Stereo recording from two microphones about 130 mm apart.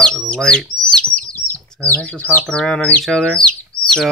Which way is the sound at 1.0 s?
10° left (ahead or behind).